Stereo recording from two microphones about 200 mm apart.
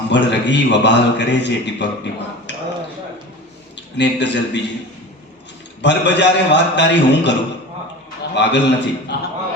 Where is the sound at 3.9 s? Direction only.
60° left (ahead or behind).